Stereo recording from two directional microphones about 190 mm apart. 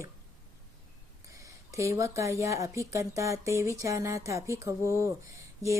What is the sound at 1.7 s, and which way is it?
A woman's voice, 15° right (ahead or behind).